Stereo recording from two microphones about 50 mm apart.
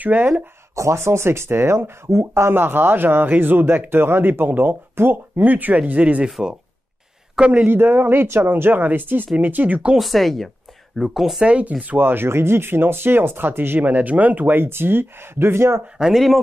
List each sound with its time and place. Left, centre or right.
0.0 s speech: right
0.7 s speech: right
2.0 s speech: right
2.5 s speech: right
5.4 s speech: right
7.3 s speech: right
7.7 s speech: right
9.9 s speech: centre
11.4 s speech: right
12.0 s speech: right
14.6 s speech: right
16.0 s speech: centre